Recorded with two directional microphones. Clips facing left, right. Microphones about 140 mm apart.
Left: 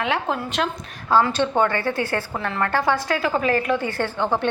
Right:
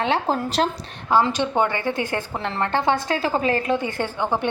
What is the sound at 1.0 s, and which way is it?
A woman's voice, 15° right (ahead or behind).